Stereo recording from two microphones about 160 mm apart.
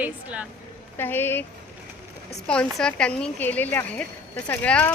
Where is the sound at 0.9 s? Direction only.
15° left (ahead or behind).